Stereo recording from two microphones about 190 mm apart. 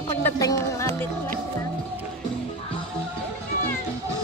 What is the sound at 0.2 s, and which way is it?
Music, 15° left (ahead or behind).